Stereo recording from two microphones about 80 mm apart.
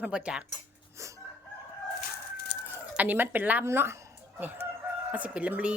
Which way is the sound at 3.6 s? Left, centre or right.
Right.